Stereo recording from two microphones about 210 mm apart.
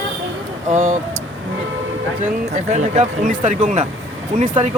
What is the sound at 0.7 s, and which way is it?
Vehicle, 35° right (ahead or behind).